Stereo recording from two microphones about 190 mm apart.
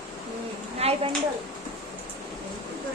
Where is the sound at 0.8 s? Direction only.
35° right (ahead or behind).